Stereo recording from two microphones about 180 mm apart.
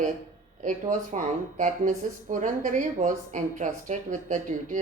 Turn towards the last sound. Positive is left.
turn(degrees=-45)  # may be behind; listen again after turning